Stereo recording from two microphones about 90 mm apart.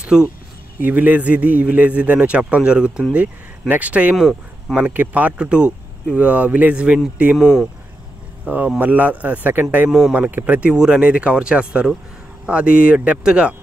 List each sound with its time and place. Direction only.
0.0 s a man's voice: 10° right (ahead or behind)
4.2 s speech: centre (ahead or behind)
4.7 s a man's voice: 20° right (ahead or behind)
8.5 s a man's voice: 20° right (ahead or behind)
9.8 s speech: centre (ahead or behind)
10.1 s a man's voice: 15° right (ahead or behind)